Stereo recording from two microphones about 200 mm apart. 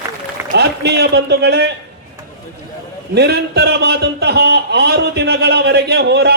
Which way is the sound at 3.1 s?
55° right (ahead or behind).